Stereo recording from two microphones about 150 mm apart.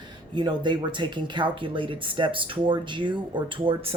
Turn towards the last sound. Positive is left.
turn(degrees=-35)  # may be behind; listen again after turning